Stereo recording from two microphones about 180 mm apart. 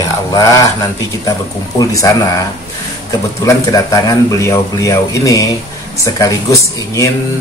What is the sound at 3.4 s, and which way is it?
Speech, 15° left (ahead or behind).